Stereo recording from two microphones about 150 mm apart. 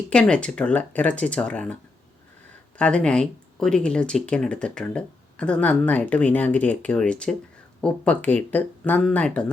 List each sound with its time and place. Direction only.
0.1 s speech: 5° left (ahead or behind)